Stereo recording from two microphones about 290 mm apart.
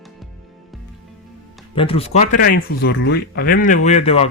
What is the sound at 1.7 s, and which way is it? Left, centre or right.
Speech, centre.